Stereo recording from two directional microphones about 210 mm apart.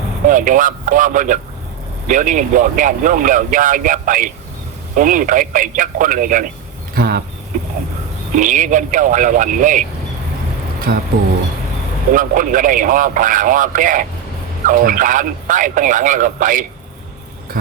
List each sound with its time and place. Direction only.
0.3 s speech: 40° right (ahead or behind)
8.4 s speech: 35° right (ahead or behind)
10.9 s speech: 50° right (ahead or behind)
12.1 s speech: 40° right (ahead or behind)